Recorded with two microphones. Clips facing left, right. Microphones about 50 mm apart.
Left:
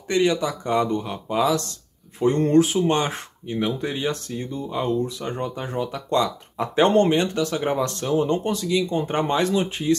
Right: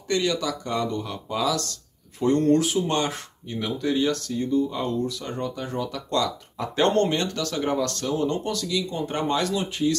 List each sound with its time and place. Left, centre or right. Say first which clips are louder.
0.1 s speech: left 4 dB; left